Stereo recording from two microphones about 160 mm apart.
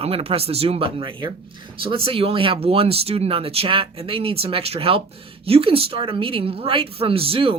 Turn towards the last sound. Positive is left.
turn(degrees=-35)  # may be behind; listen again after turning